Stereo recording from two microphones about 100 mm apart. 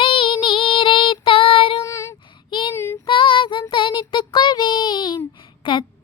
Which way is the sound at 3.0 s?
60° left (ahead or behind).